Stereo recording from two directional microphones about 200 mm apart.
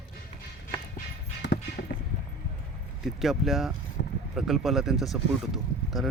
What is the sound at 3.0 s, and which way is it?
Speech, centre (ahead or behind).